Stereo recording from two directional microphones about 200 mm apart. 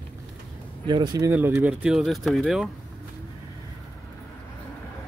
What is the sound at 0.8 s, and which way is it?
Speech, 20° right (ahead or behind).